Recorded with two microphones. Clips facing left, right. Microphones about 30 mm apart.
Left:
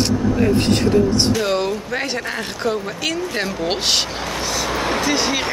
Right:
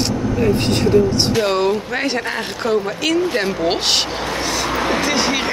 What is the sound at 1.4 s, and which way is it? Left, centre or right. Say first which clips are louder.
Speech: right 3 dB; centre.